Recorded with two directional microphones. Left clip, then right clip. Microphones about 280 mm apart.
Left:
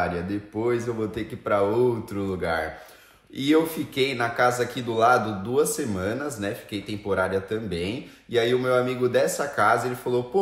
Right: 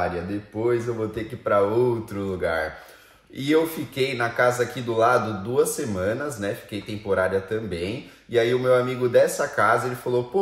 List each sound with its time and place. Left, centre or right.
0.6 s speech: centre